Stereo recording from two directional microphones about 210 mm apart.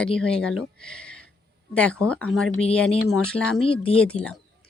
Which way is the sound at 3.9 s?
5° left (ahead or behind).